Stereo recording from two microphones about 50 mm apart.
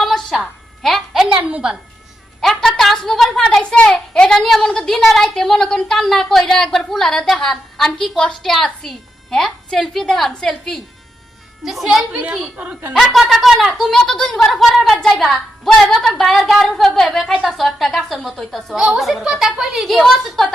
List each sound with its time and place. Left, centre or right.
0.0 s a sound: centre
1.3 s a woman's voice: right
2.4 s a woman's voice: centre
13.9 s a woman's voice: centre
14.5 s a woman's voice: centre